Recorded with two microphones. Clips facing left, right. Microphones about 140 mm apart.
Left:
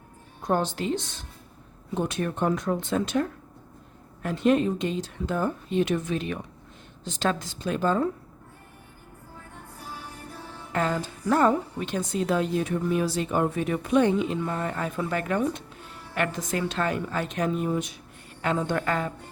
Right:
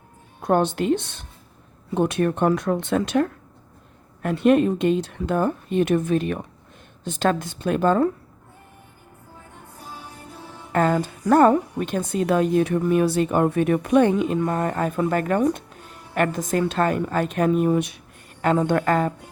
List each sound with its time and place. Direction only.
0.4 s speech: 60° right (ahead or behind)
9.8 s music: 15° right (ahead or behind)
10.7 s a woman's voice: 50° right (ahead or behind); by 18.0 s 65° right (ahead or behind)
18.4 s speech: 55° right (ahead or behind)